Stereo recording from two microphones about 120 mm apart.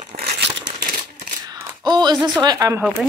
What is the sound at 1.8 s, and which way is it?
Speech, 35° right (ahead or behind).